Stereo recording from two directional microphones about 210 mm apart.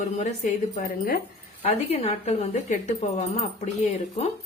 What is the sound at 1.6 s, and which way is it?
A woman's voice, 30° left (ahead or behind).